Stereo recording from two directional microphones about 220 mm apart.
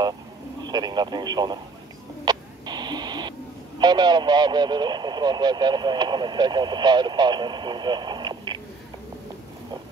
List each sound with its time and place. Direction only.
0.7 s speech: 20° right (ahead or behind)
2.2 s a sound: 20° right (ahead or behind)
3.8 s speech: 20° right (ahead or behind)